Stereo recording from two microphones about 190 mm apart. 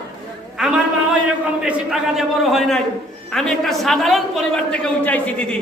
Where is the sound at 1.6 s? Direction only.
5° right (ahead or behind).